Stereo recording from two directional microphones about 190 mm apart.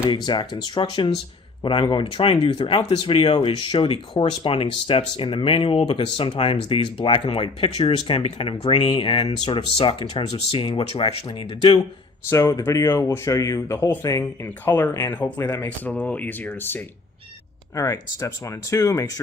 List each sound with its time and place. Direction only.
0.3 s speech: 25° left (ahead or behind)
12.3 s speech: 15° left (ahead or behind)